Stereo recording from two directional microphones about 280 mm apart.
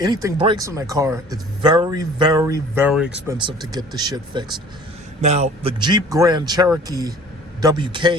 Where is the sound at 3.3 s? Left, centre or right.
Centre.